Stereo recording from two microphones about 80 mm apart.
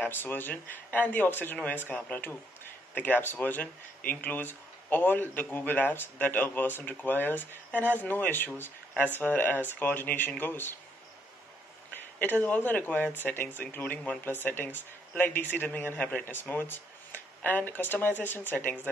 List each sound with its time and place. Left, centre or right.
0.0 s speech: left
12.2 s speech: centre